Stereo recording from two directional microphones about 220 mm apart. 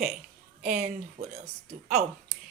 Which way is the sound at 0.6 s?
35° right (ahead or behind).